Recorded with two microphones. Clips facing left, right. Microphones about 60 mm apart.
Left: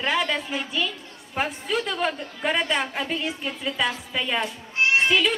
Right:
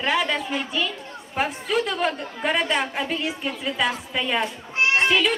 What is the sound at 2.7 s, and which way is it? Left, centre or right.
A woman's voice, centre.